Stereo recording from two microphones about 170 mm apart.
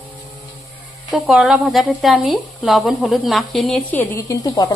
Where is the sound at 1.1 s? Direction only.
Centre (ahead or behind).